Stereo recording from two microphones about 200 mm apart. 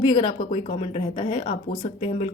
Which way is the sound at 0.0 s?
20° left (ahead or behind).